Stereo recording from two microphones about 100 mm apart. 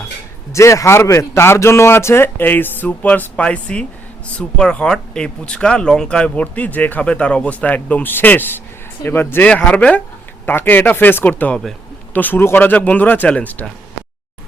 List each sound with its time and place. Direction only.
0.5 s a man's voice: 30° left (ahead or behind)